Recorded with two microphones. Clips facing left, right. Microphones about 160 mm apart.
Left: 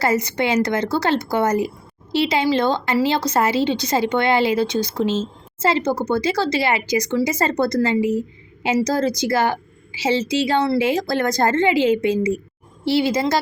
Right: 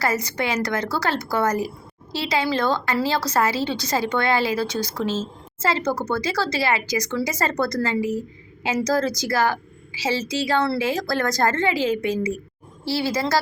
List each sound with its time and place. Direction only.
0.0 s a woman's voice: 20° left (ahead or behind)